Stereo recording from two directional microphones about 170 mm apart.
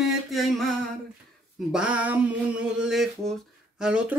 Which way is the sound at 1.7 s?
5° right (ahead or behind).